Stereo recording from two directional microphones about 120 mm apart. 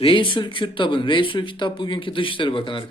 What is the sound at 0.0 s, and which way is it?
Speech, 45° left (ahead or behind).